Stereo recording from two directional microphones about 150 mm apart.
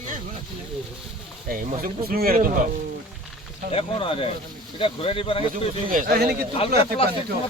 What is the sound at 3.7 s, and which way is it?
Speech, 35° left (ahead or behind).